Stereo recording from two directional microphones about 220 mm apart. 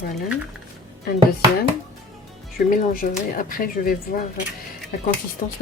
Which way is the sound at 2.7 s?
40° left (ahead or behind).